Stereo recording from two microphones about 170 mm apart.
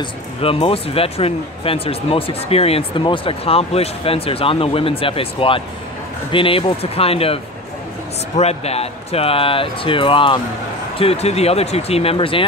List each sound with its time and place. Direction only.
0.0 s speech: 35° left (ahead or behind)
8.4 s speech: 40° left (ahead or behind)